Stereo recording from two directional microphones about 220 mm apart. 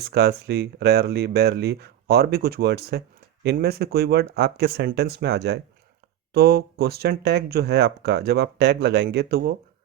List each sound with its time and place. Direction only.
0.0 s speech: 45° right (ahead or behind)